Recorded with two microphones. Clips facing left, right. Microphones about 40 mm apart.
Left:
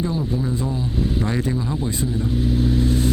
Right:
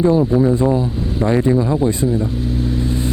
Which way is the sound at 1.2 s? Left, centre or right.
Right.